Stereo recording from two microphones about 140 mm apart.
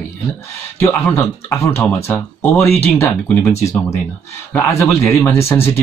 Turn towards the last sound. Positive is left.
turn(degrees=20)  # may be behind; listen again after turning